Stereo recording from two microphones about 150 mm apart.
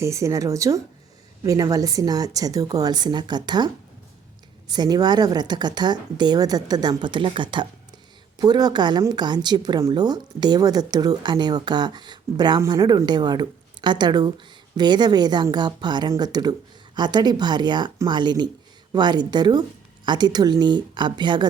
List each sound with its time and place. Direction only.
0.0 s speech: 20° right (ahead or behind)
4.7 s speech: 25° right (ahead or behind)